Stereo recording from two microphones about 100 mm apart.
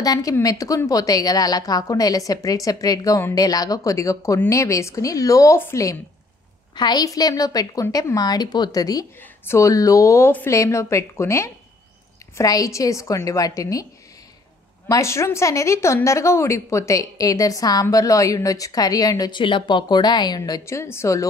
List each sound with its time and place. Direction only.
0.0 s a woman's voice: 40° left (ahead or behind)
6.7 s a woman's voice: 45° left (ahead or behind)
14.9 s a woman's voice: 30° left (ahead or behind)
19.4 s speech: 55° left (ahead or behind)
20.6 s a woman's voice: 30° left (ahead or behind)